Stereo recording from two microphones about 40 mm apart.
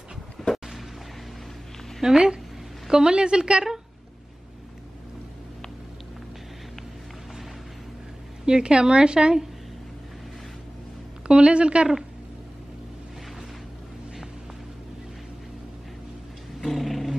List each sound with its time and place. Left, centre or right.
0.4 s a sound: centre
2.0 s a woman's voice: centre
8.5 s a woman's voice: right
11.2 s a woman's voice: right
16.6 s dog: centre